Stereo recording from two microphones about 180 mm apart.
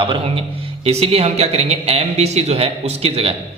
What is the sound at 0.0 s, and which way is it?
A man's voice, 30° right (ahead or behind).